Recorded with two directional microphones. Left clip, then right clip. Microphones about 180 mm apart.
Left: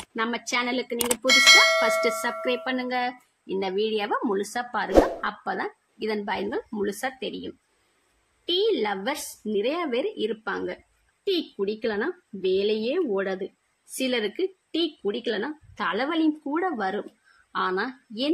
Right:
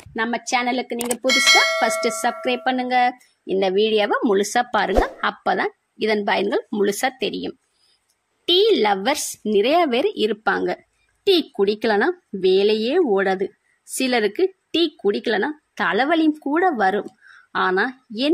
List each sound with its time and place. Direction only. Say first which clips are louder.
0.1 s a woman's voice: right 5 dB; 30° right (ahead or behind)
1.2 s speech: even; centre (ahead or behind)
2.4 s a woman's voice: right 5 dB; 40° right (ahead or behind)